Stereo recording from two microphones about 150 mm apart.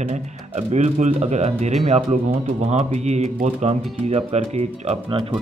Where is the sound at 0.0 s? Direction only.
50° right (ahead or behind).